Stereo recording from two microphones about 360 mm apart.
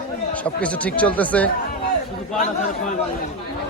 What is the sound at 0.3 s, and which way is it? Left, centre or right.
Speech, centre.